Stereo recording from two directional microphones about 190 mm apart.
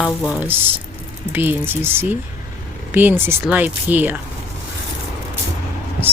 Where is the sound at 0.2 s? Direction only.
Centre (ahead or behind).